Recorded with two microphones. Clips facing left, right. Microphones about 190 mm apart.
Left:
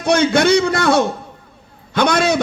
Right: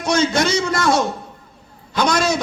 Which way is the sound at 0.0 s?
60° left (ahead or behind).